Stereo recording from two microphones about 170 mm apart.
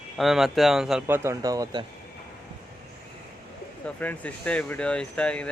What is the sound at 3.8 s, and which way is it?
Speech, 10° left (ahead or behind).